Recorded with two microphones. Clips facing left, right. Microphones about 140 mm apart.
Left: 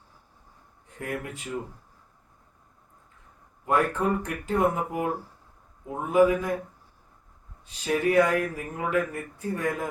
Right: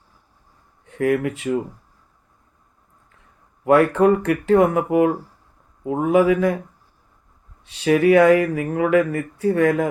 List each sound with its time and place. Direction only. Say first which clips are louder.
0.9 s speech: right 14 dB; 80° right
3.6 s speech: right 10 dB; 85° right
7.6 s speech: right 9 dB; 75° right (ahead or behind)